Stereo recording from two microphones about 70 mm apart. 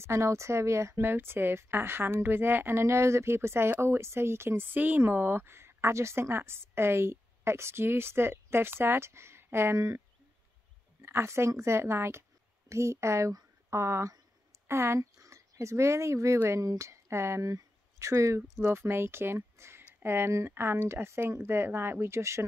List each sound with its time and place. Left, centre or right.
0.0 s a woman's voice: right